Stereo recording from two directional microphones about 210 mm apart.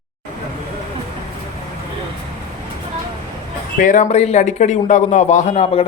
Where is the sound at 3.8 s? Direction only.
35° left (ahead or behind).